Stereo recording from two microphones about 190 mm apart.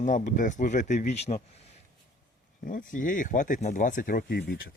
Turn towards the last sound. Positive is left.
turn(degrees=50)  # may be behind; listen again after turning